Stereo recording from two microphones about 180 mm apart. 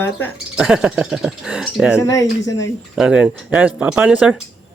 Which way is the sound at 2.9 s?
5° right (ahead or behind).